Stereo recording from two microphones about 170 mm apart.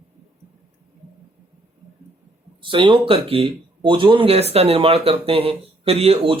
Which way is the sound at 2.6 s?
30° right (ahead or behind).